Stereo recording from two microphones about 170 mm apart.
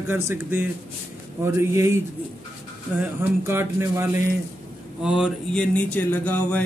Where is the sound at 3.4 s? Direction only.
15° right (ahead or behind).